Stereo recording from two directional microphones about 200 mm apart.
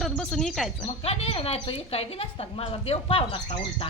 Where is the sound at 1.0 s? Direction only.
30° left (ahead or behind).